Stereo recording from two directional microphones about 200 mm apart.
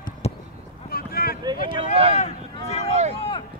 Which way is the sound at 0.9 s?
50° left (ahead or behind).